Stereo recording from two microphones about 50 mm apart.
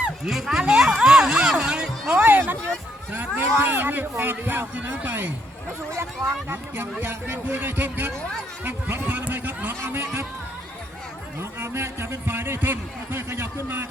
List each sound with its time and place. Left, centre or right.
0.3 s speech: centre
1.0 s a sound: centre
2.1 s a man's voice: right
6.0 s a man's voice: right
9.8 s speech: right
11.3 s a man's voice: right